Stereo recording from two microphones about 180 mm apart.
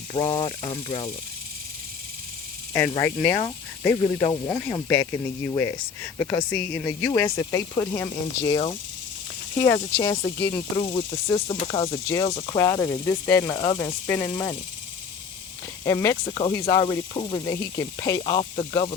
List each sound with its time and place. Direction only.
0.1 s speech: 25° left (ahead or behind)
2.7 s speech: 15° left (ahead or behind)
9.6 s speech: 65° left (ahead or behind)
10.3 s speech: 15° left (ahead or behind)
11.4 s snake: 35° left (ahead or behind)
11.9 s speech: 15° left (ahead or behind)
15.8 s speech: 15° left (ahead or behind)